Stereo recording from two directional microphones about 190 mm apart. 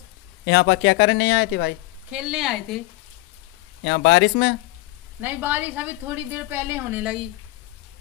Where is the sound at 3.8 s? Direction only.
65° left (ahead or behind).